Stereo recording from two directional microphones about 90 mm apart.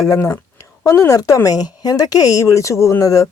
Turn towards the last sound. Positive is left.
turn(degrees=35)  # may be behind; listen again after turning